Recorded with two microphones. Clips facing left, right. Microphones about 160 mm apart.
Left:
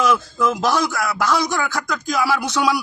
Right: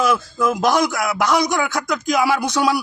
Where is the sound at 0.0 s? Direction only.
10° right (ahead or behind).